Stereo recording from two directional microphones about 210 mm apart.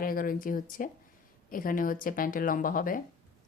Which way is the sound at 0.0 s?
40° left (ahead or behind).